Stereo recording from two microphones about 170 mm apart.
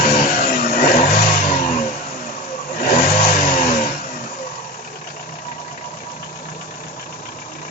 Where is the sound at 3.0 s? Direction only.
40° left (ahead or behind).